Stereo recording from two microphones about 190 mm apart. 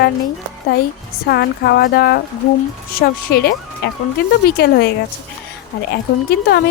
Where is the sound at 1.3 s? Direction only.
60° left (ahead or behind).